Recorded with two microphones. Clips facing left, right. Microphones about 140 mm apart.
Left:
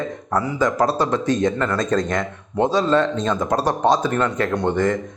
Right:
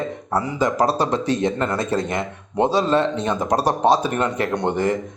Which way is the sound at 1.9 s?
10° right (ahead or behind).